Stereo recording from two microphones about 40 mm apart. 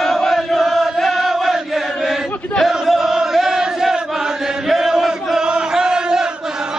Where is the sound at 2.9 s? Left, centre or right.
Centre.